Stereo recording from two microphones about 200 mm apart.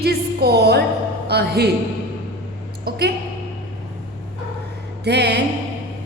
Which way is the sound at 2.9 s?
55° right (ahead or behind).